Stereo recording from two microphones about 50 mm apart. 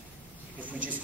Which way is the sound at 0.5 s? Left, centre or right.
Right.